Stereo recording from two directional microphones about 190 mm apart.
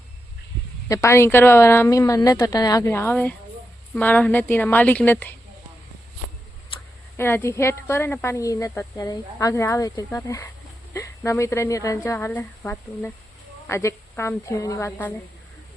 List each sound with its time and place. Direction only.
0.9 s speech: 15° left (ahead or behind)
7.2 s speech: 10° left (ahead or behind)